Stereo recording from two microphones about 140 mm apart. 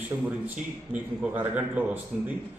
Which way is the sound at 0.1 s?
20° right (ahead or behind).